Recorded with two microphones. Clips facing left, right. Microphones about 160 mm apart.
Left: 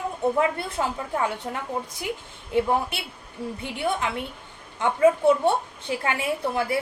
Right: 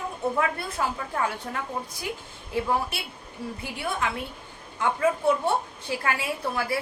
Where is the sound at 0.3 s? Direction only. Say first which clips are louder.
Left 3 dB; 20° left (ahead or behind).